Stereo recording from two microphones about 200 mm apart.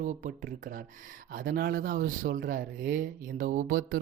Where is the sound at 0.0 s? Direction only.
40° right (ahead or behind).